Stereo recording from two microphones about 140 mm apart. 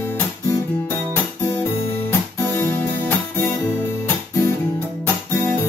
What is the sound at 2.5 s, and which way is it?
Music, 15° left (ahead or behind).